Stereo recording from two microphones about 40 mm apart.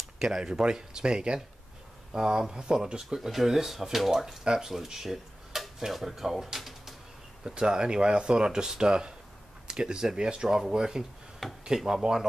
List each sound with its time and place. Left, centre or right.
0.2 s speech: centre
3.2 s speech: centre
7.4 s speech: centre